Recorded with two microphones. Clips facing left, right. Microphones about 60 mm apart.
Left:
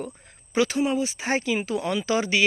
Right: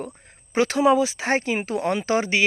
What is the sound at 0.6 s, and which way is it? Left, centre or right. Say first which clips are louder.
Speech: right 9 dB; right.